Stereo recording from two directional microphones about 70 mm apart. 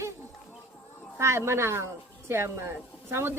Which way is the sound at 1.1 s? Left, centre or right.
Right.